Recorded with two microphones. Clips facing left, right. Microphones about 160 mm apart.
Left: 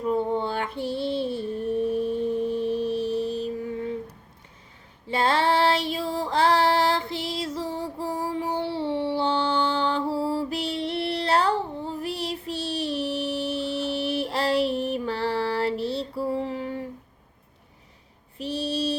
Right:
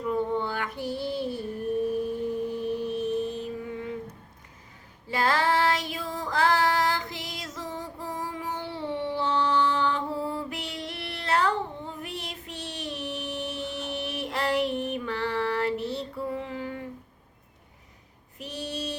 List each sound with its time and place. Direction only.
0.0 s female singing: 30° left (ahead or behind)
5.0 s female singing: 25° left (ahead or behind)
18.3 s mantra: 30° left (ahead or behind)